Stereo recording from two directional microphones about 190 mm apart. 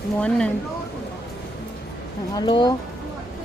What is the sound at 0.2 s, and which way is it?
Speech, 5° left (ahead or behind).